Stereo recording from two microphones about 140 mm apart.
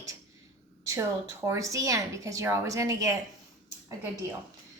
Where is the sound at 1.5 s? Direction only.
20° right (ahead or behind).